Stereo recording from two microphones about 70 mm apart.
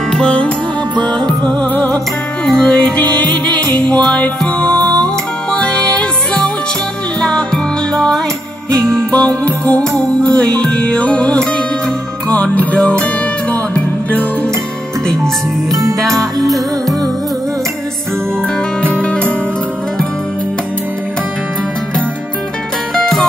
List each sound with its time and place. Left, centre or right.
0.1 s music: centre
3.3 s music: right
3.7 s music: centre
16.0 s music: centre
16.5 s music: right
18.9 s music: centre
22.9 s music: centre